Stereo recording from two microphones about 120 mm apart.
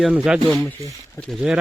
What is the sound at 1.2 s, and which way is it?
Speech, 20° left (ahead or behind).